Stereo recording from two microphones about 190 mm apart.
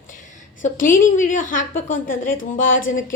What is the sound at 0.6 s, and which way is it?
A woman's voice, 45° left (ahead or behind).